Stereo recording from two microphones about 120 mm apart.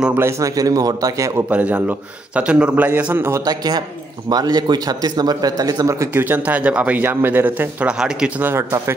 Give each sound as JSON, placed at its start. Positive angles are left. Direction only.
{"t": 0.2, "sound": "a man's voice", "side_deg": -25}
{"t": 1.5, "sound": "speech", "side_deg": -10}
{"t": 3.4, "sound": "speech", "side_deg": -35}
{"t": 8.5, "sound": "a man's voice", "side_deg": -20}